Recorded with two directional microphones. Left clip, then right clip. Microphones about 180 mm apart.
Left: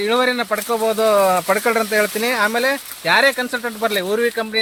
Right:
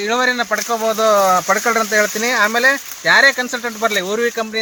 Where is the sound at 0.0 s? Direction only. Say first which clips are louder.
Right 1 dB; 40° left (ahead or behind).